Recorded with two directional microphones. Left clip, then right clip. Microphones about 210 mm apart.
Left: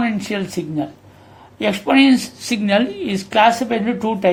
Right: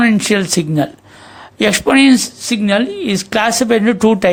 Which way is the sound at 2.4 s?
20° right (ahead or behind).